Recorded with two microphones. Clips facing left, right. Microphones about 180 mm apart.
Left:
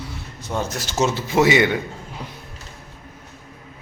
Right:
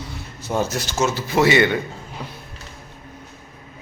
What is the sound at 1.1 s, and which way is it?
Speech, 20° left (ahead or behind).